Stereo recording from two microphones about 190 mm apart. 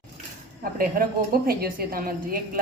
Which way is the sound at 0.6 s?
50° right (ahead or behind).